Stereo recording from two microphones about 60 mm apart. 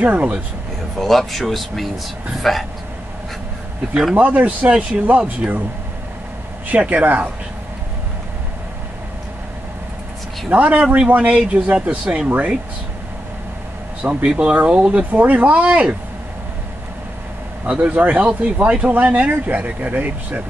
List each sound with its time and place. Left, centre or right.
0.0 s speech: right
0.9 s speech: centre
4.1 s speech: right
6.7 s speech: right
10.5 s speech: right
14.0 s speech: centre
17.6 s speech: right